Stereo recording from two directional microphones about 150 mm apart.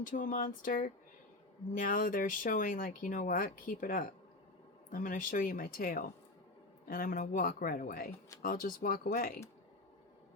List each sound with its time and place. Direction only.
0.0 s speech: 65° left (ahead or behind)